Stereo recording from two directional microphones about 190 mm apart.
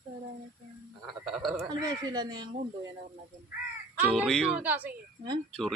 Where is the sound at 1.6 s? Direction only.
20° right (ahead or behind).